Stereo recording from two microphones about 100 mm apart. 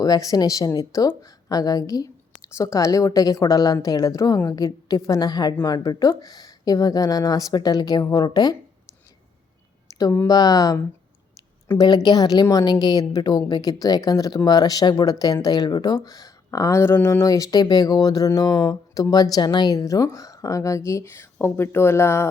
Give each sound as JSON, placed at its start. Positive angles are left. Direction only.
{"t": 0.0, "sound": "speech", "side_deg": 35}
{"t": 10.0, "sound": "speech", "side_deg": 25}
{"t": 10.2, "sound": "speech", "side_deg": 40}
{"t": 11.7, "sound": "a woman's voice", "side_deg": 25}
{"t": 12.0, "sound": "speech", "side_deg": 40}